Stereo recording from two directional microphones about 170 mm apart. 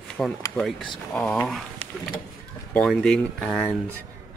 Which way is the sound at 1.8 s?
35° right (ahead or behind).